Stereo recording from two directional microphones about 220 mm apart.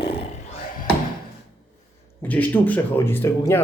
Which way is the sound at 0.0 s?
25° left (ahead or behind).